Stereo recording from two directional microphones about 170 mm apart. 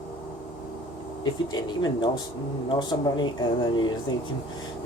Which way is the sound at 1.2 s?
25° left (ahead or behind).